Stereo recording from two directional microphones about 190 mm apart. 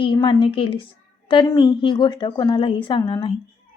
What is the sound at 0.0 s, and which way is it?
Speech, 25° left (ahead or behind).